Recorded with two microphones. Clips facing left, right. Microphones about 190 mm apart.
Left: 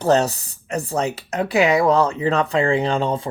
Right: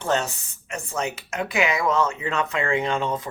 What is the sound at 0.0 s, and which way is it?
Speech, 40° left (ahead or behind).